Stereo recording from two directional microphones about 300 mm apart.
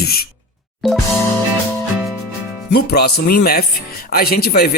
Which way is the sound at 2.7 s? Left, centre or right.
Left.